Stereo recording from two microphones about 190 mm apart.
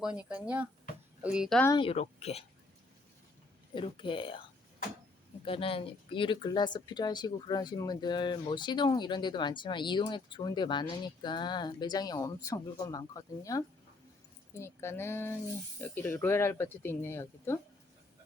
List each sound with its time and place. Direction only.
0.0 s a woman's voice: 5° right (ahead or behind)
1.6 s speech: 25° left (ahead or behind)
3.8 s speech: 25° left (ahead or behind)
5.5 s speech: 30° left (ahead or behind); by 17.6 s 10° left (ahead or behind)